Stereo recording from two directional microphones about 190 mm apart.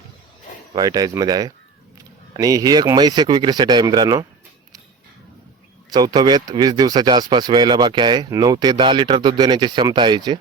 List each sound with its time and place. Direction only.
0.7 s speech: 20° right (ahead or behind)
5.9 s speech: 20° right (ahead or behind)